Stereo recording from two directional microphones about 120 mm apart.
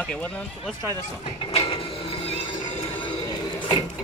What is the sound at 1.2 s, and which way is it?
Music, 50° left (ahead or behind).